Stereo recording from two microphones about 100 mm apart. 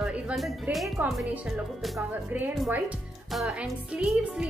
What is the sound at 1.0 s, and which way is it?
Speech, 15° right (ahead or behind).